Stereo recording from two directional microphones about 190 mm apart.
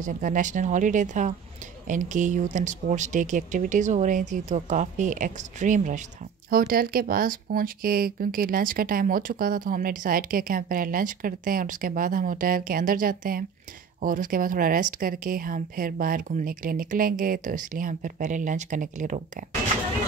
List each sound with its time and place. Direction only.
0.0 s speech: 40° right (ahead or behind)
6.5 s speech: 50° right (ahead or behind)